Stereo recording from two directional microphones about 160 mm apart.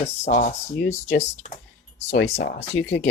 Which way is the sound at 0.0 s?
50° left (ahead or behind).